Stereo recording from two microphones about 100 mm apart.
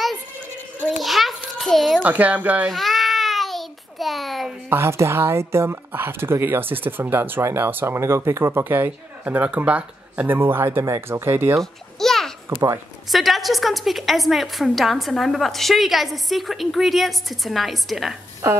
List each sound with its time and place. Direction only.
1.0 s children playing: centre (ahead or behind)
2.0 s speech: 15° right (ahead or behind)
2.7 s a sound: centre (ahead or behind)
4.6 s speech: 25° right (ahead or behind)
11.6 s babbling: 5° left (ahead or behind)
12.4 s speech: 30° right (ahead or behind)
13.1 s a woman's voice: centre (ahead or behind)